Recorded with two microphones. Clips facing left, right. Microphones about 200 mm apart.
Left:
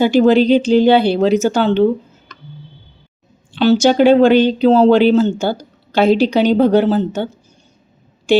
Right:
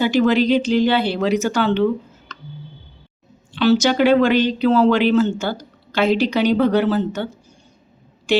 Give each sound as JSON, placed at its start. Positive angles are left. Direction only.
{"t": 0.2, "sound": "a woman's voice", "side_deg": 30}
{"t": 3.5, "sound": "a woman's voice", "side_deg": 30}